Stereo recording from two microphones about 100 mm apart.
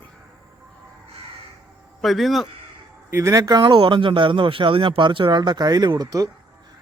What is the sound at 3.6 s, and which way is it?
Speech, 50° right (ahead or behind).